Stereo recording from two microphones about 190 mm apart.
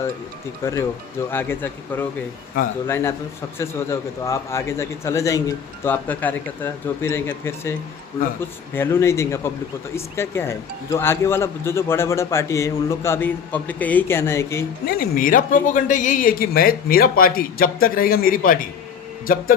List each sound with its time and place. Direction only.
0.6 s speech: 15° left (ahead or behind)
14.8 s speech: 50° left (ahead or behind)